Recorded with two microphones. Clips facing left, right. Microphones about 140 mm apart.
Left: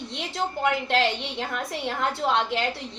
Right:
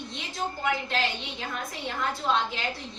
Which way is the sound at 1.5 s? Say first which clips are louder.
Left 2 dB; 70° left (ahead or behind).